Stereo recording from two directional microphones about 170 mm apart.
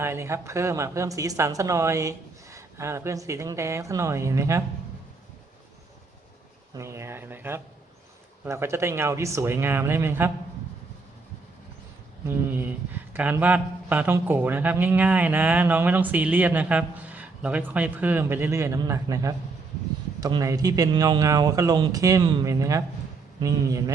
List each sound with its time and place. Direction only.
0.0 s speech: 15° right (ahead or behind)
6.7 s speech: 15° right (ahead or behind)
12.3 s speech: 10° right (ahead or behind)